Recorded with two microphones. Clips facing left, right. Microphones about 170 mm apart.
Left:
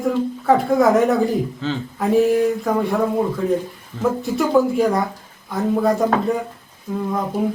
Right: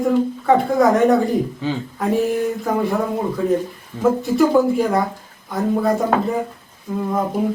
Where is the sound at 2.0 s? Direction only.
Centre (ahead or behind).